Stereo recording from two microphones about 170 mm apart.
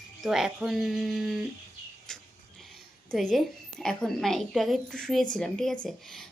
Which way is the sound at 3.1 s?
Centre (ahead or behind).